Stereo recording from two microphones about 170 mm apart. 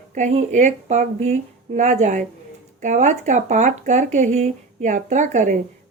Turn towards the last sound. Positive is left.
turn(degrees=-45)  # may be behind; listen again after turning